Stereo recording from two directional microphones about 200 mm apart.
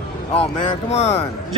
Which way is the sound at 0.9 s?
30° left (ahead or behind).